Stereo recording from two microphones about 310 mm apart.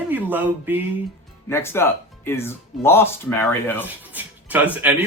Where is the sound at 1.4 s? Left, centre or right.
Centre.